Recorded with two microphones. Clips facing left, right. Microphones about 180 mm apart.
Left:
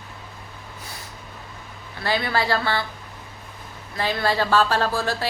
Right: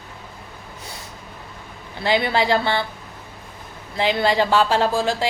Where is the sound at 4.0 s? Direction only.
20° right (ahead or behind).